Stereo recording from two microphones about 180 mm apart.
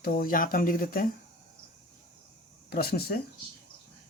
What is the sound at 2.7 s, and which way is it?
Speech, 60° left (ahead or behind).